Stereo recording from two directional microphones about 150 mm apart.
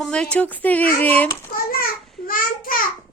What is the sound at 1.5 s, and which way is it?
A child's voice, 75° left (ahead or behind).